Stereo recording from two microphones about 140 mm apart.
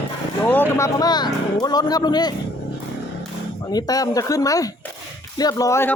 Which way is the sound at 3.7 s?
25° left (ahead or behind).